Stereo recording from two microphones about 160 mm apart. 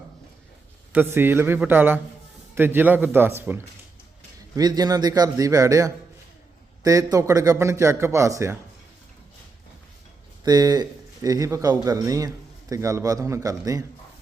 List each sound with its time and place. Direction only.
0.9 s speech: 15° right (ahead or behind)
4.5 s a man's voice: 25° right (ahead or behind)
10.4 s a man's voice: 25° right (ahead or behind)